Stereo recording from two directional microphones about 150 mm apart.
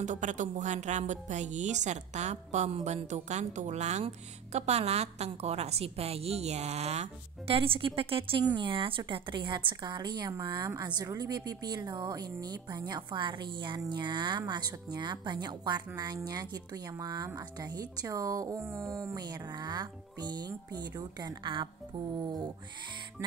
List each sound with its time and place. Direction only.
0.0 s a woman's voice: 55° right (ahead or behind); by 22.5 s 30° right (ahead or behind)